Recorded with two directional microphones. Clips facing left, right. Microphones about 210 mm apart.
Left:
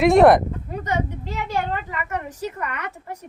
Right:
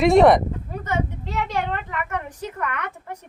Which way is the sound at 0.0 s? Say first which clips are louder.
Left 1 dB; centre (ahead or behind).